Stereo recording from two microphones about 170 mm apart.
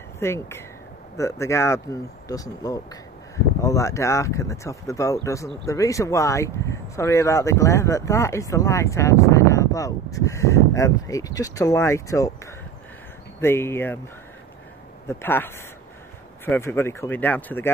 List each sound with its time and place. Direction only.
0.2 s speech: 15° left (ahead or behind)
13.4 s speech: 15° left (ahead or behind)
15.0 s speech: 15° left (ahead or behind)